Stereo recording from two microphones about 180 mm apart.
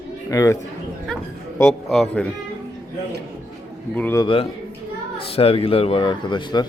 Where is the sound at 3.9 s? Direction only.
10° left (ahead or behind).